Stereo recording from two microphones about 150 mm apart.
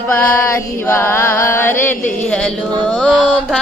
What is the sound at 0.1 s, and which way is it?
Music, 15° left (ahead or behind).